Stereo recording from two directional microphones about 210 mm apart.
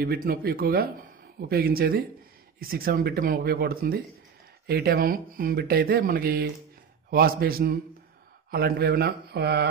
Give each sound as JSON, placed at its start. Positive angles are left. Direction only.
{"t": 0.0, "sound": "speech", "side_deg": -45}